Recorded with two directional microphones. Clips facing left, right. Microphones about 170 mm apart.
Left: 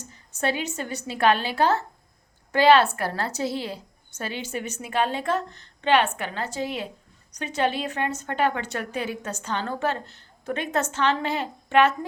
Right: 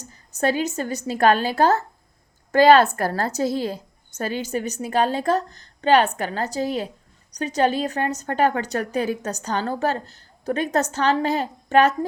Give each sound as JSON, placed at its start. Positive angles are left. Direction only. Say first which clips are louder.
{"t": 0.0, "sound": "a woman's voice", "louder": "right 4 dB", "side_deg": -40}